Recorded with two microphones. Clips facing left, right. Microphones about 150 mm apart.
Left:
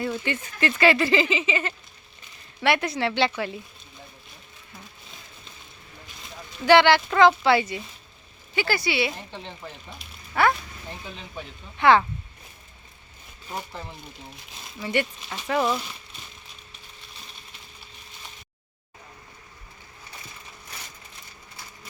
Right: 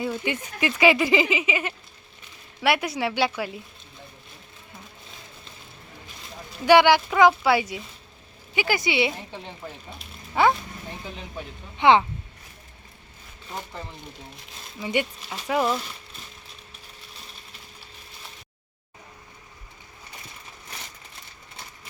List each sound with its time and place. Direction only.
0.0 s speech: 10° right (ahead or behind)
6.7 s speech: 10° right (ahead or behind)
11.8 s speech: 20° right (ahead or behind)
14.8 s speech: 15° right (ahead or behind)